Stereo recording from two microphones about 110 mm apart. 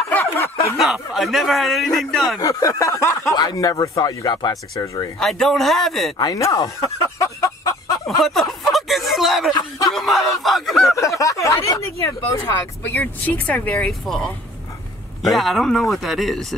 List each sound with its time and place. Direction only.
0.1 s snicker: 25° left (ahead or behind)
0.7 s speech: centre (ahead or behind)
2.4 s speech: 30° left (ahead or behind)
5.2 s speech: 5° left (ahead or behind)
6.1 s speech: 35° left (ahead or behind)
8.2 s a sound: centre (ahead or behind)
9.9 s speech: centre (ahead or behind)
11.0 s speech: 30° left (ahead or behind)
12.4 s speech: 15° left (ahead or behind); by 16.5 s centre (ahead or behind)